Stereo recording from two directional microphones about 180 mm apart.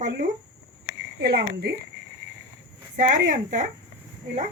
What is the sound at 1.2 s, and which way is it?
Speech, 60° right (ahead or behind).